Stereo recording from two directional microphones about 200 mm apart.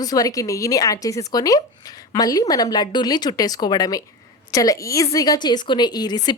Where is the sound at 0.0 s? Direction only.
15° left (ahead or behind).